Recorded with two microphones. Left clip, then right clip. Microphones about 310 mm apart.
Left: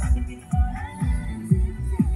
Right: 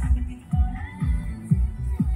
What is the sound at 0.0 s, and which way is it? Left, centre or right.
Music, centre.